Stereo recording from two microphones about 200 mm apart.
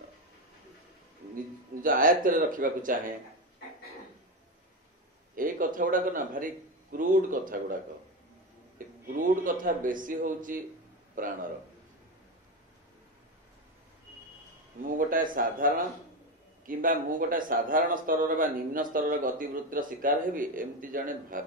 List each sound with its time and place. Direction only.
1.8 s speech: 45° right (ahead or behind)
5.3 s speech: 45° right (ahead or behind)
14.8 s speech: 45° right (ahead or behind)